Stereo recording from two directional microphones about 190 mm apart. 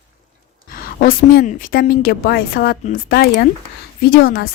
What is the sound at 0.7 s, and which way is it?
A woman's voice, 50° left (ahead or behind).